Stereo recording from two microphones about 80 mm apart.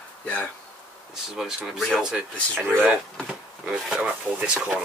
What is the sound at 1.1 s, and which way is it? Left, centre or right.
Speech, centre.